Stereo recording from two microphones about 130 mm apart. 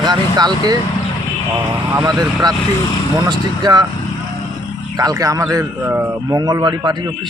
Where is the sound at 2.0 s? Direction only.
30° right (ahead or behind).